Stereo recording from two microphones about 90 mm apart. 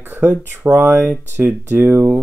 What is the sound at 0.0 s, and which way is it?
Speech, 25° right (ahead or behind).